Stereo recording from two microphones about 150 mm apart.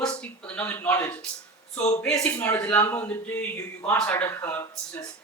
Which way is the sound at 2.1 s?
20° left (ahead or behind).